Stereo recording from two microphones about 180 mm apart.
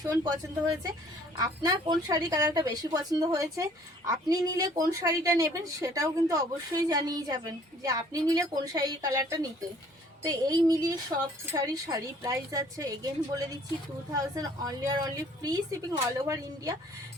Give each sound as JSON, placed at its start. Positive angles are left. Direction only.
{"t": 0.0, "sound": "a woman's voice", "side_deg": -20}
{"t": 1.4, "sound": "a woman's voice", "side_deg": -20}